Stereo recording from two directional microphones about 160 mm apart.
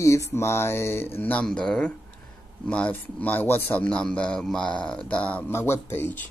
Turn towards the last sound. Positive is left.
turn(degrees=15)  # may be behind; listen again after turning